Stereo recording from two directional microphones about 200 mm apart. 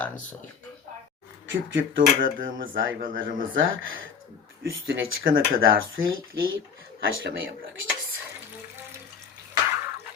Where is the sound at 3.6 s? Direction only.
75° right (ahead or behind).